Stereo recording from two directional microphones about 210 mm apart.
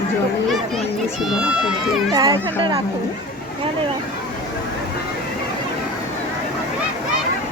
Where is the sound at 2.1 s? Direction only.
15° right (ahead or behind).